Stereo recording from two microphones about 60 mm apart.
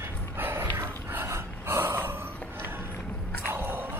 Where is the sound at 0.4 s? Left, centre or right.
Right.